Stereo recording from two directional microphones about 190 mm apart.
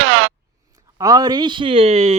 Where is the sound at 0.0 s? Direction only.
90° right.